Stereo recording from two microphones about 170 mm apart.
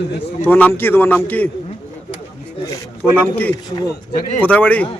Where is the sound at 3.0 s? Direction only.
10° left (ahead or behind).